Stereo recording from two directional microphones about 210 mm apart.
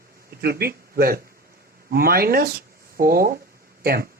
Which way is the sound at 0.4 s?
45° right (ahead or behind).